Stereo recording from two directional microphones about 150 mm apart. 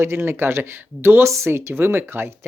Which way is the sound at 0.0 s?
15° right (ahead or behind).